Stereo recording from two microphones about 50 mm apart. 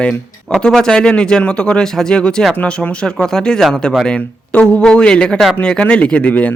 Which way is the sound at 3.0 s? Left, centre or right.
Centre.